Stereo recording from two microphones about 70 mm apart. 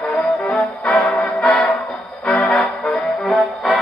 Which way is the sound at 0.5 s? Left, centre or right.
Centre.